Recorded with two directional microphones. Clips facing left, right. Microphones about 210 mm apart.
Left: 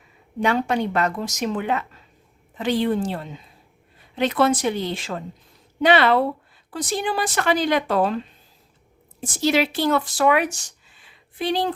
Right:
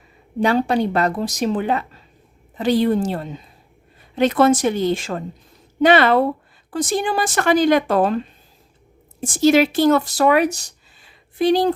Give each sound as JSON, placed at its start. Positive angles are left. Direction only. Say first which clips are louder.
{"t": 0.3, "sound": "speech", "louder": "right 4 dB", "side_deg": -35}
{"t": 9.2, "sound": "speech", "louder": "right 6 dB", "side_deg": -45}